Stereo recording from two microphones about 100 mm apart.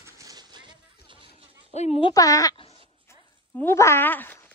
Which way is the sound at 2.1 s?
35° left (ahead or behind).